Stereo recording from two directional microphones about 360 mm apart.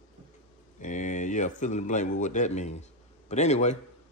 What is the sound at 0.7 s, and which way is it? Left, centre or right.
Speech, left.